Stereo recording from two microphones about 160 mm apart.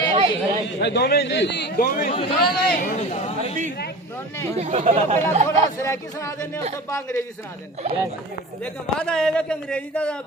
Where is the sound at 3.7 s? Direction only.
85° left.